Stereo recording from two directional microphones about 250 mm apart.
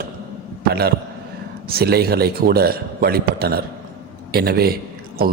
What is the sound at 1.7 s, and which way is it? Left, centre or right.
A man's voice, right.